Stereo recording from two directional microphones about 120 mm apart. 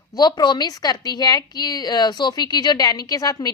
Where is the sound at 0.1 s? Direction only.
35° left (ahead or behind).